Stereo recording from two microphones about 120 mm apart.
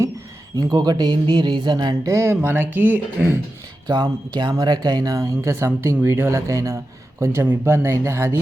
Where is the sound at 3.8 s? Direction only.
35° right (ahead or behind).